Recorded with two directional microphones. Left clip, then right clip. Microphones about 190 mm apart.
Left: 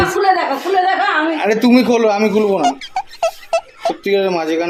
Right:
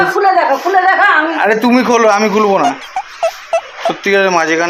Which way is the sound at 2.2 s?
15° right (ahead or behind).